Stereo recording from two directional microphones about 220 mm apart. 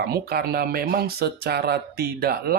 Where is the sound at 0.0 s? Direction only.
45° right (ahead or behind).